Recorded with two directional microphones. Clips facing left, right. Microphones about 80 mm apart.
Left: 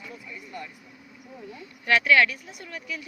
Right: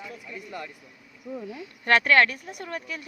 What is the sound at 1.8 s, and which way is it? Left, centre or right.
Speech, right.